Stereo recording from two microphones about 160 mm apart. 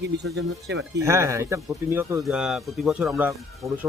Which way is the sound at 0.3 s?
90° right.